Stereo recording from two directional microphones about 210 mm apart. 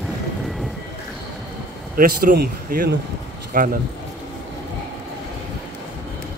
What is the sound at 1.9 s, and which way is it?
A man's voice, 45° right (ahead or behind).